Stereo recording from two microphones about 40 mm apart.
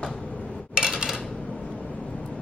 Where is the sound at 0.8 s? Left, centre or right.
Right.